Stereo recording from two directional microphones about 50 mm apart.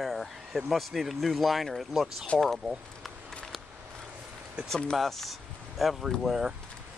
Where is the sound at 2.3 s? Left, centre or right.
Left.